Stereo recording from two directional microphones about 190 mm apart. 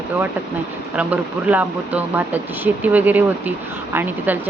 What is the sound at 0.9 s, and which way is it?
Speech, 5° right (ahead or behind).